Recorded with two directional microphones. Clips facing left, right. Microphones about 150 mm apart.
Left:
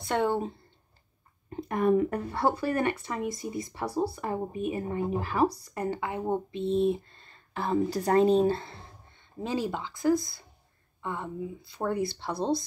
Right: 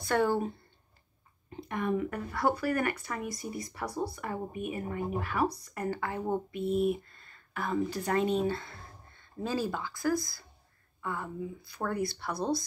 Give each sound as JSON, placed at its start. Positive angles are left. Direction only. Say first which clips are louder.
{"t": 0.0, "sound": "speech", "louder": "even", "side_deg": 20}
{"t": 1.5, "sound": "speech", "louder": "left 7 dB", "side_deg": 40}
{"t": 9.1, "sound": "speech", "louder": "left 2 dB", "side_deg": 20}